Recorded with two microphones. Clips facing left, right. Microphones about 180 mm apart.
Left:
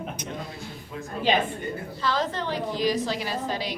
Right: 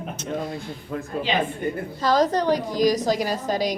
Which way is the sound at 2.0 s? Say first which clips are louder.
Right 8 dB; 40° right (ahead or behind).